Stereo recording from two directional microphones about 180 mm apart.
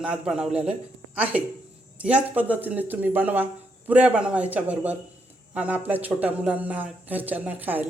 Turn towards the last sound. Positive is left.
turn(degrees=-10)  # may be behind; listen again after turning